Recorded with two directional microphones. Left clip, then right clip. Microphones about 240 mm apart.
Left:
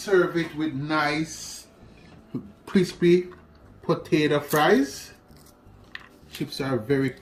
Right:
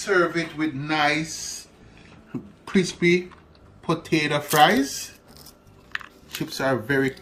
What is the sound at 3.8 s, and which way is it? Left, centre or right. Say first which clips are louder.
Speech: even; centre.